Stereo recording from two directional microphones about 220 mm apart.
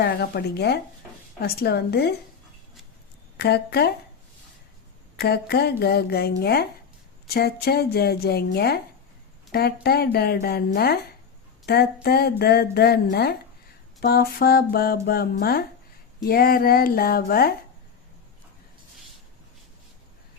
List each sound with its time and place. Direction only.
0.0 s speech: 50° left (ahead or behind)
3.3 s speech: 50° left (ahead or behind)
5.1 s speech: 45° left (ahead or behind)